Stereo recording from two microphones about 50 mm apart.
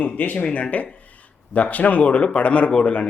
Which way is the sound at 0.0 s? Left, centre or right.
Left.